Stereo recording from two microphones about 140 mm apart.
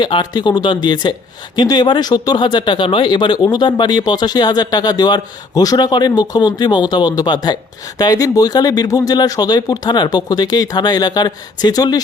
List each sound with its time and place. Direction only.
0.0 s speech: 30° left (ahead or behind)